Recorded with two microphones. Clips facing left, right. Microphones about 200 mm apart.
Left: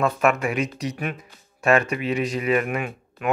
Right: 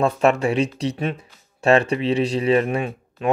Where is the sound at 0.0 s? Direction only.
30° right (ahead or behind).